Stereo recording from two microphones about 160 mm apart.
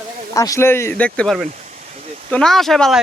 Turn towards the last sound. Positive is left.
turn(degrees=0)  # may be behind; listen again after turning